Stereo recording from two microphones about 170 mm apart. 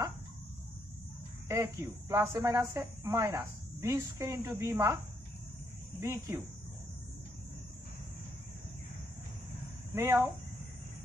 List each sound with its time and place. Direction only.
1.5 s speech: 15° right (ahead or behind)
5.9 s speech: 15° right (ahead or behind)
9.9 s speech: 15° right (ahead or behind)